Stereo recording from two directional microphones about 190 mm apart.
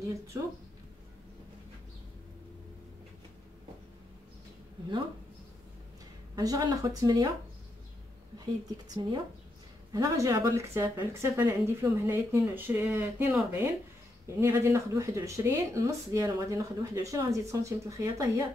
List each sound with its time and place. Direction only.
0.3 s speech: 15° right (ahead or behind)
6.3 s speech: 20° right (ahead or behind)
8.5 s speech: 20° right (ahead or behind)